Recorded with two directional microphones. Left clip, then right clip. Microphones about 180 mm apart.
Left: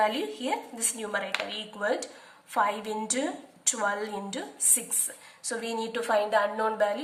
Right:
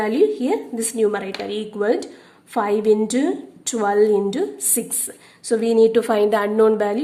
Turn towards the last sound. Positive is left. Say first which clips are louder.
# right 10 dB
turn(degrees=-40)  # may be behind; listen again after turning